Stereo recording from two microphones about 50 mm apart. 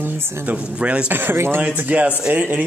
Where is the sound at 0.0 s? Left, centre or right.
Right.